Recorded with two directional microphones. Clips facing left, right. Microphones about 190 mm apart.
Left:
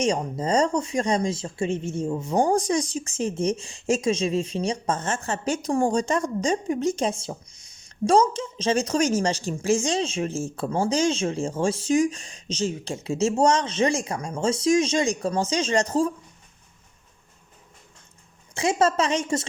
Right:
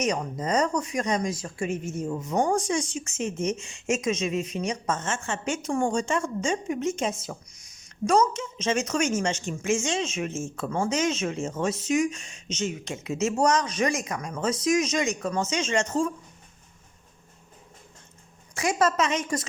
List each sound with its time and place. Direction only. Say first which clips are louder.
0.0 s speech: left 3 dB; 30° left (ahead or behind)
18.5 s a woman's voice: left 2 dB; 25° left (ahead or behind)